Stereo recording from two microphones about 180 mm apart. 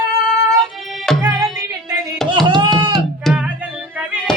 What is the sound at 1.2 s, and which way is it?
Music, 10° right (ahead or behind).